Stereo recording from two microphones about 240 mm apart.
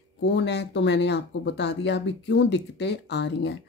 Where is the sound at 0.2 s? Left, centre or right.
Left.